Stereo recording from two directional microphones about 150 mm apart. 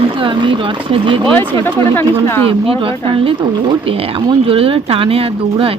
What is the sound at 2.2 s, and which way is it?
Speech, 15° left (ahead or behind).